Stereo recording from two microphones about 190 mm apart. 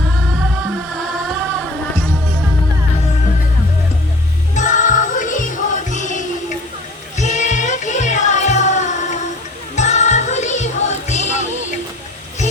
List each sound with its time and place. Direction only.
0.1 s music: centre (ahead or behind)
4.5 s music: 40° left (ahead or behind)